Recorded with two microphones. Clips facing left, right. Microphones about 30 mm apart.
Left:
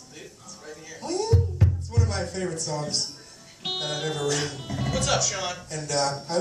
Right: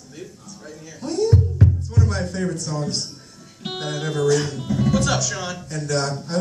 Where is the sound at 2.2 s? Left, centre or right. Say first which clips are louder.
Right 4 dB; right.